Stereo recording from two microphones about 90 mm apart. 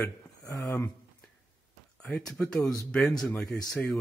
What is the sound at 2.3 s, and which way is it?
Speech, 10° left (ahead or behind).